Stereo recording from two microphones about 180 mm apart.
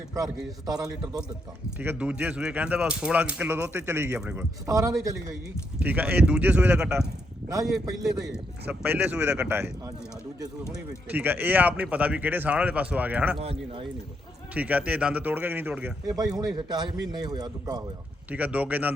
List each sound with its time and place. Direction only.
0.6 s a man's voice: 20° right (ahead or behind)
1.8 s a man's voice: 10° right (ahead or behind)
8.8 s a man's voice: 10° right (ahead or behind)
11.1 s a man's voice: 10° right (ahead or behind)
13.4 s speech: 35° right (ahead or behind)
14.5 s a man's voice: 10° right (ahead or behind)
16.0 s a man's voice: 20° right (ahead or behind)
18.3 s a man's voice: 10° right (ahead or behind)